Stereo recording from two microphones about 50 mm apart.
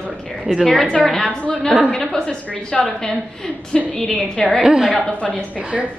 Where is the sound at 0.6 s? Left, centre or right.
Centre.